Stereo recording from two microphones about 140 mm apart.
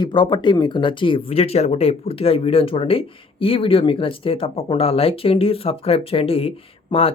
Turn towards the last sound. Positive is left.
turn(degrees=40)  # may be behind; listen again after turning